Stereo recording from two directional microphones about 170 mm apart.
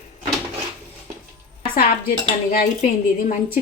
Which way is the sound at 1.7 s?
60° left (ahead or behind).